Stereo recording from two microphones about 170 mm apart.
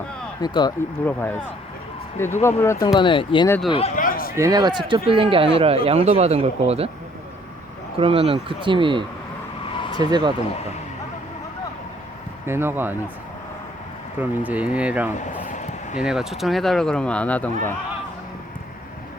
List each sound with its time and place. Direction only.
0.4 s speech: 25° left (ahead or behind)
1.0 s speech: 10° left (ahead or behind)
2.8 s speech: 25° left (ahead or behind)
3.9 s speech: 50° left (ahead or behind)
4.4 s speech: 20° right (ahead or behind)
4.9 s speech: 30° right (ahead or behind)
7.9 s speech: 35° right (ahead or behind)
12.5 s speech: 15° right (ahead or behind)
14.2 s speech: 10° right (ahead or behind)
15.4 s a sound: 45° left (ahead or behind)
16.0 s speech: 5° right (ahead or behind)